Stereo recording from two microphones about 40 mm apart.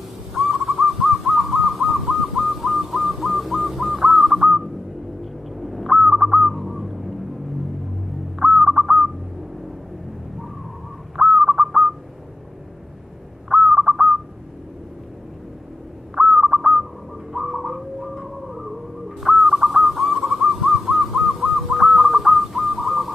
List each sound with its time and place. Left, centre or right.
0.3 s owl: centre
2.3 s whistling: centre
4.4 s whistling: centre
5.2 s owl: centre
6.0 s bird: centre
8.4 s bird: centre
8.6 s bird: centre
11.1 s bird: centre
13.5 s owl: centre
16.2 s bird: centre